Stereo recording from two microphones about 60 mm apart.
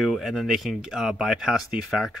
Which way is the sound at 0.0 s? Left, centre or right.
Centre.